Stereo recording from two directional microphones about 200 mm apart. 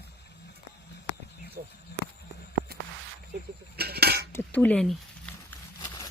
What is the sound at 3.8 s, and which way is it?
Cutlery, 50° right (ahead or behind).